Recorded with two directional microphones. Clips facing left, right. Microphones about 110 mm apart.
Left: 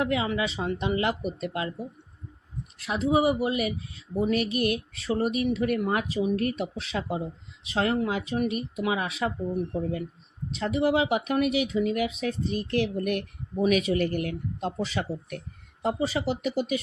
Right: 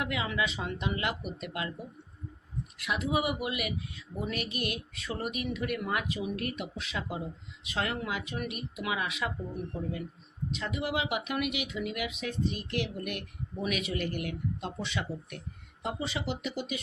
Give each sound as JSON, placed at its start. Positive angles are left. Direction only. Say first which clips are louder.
{"t": 0.0, "sound": "speech", "louder": "left 6 dB", "side_deg": 30}
{"t": 2.7, "sound": "speech", "louder": "left 7 dB", "side_deg": 30}
{"t": 10.5, "sound": "speech", "louder": "left 9 dB", "side_deg": 35}